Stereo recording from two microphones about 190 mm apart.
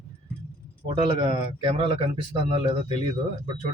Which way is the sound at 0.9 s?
25° right (ahead or behind).